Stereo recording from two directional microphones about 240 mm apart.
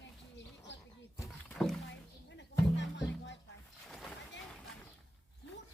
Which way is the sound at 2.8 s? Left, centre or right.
Left.